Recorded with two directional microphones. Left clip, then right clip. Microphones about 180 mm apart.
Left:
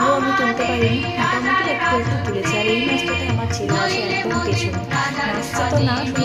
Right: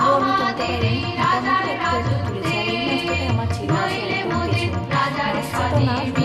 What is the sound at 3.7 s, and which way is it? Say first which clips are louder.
Music: left 2 dB; 40° right (ahead or behind).